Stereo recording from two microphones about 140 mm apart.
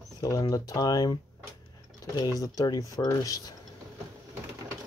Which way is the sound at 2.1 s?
25° left (ahead or behind).